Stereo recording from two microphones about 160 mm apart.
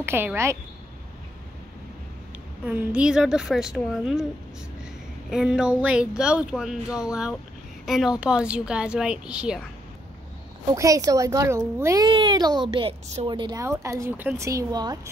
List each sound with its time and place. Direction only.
0.0 s a woman's voice: 15° right (ahead or behind)
2.6 s speech: 10° right (ahead or behind)
5.3 s a woman's voice: 5° right (ahead or behind)
10.7 s speech: 20° right (ahead or behind)
12.1 s speech: 30° right (ahead or behind)